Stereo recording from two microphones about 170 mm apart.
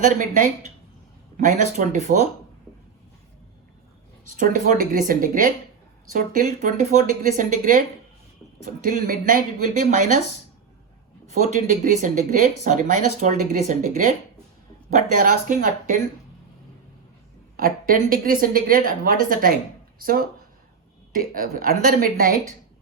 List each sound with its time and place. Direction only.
1.4 s a woman's voice: 50° right (ahead or behind)
4.4 s a woman's voice: 50° right (ahead or behind)
11.3 s a woman's voice: 45° right (ahead or behind)
17.6 s a woman's voice: 55° right (ahead or behind)
21.3 s a woman's voice: 60° right (ahead or behind)